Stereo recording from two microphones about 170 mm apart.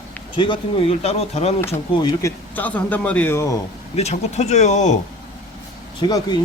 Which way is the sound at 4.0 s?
40° left (ahead or behind).